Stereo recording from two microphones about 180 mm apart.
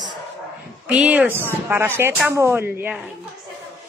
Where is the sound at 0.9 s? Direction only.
10° right (ahead or behind).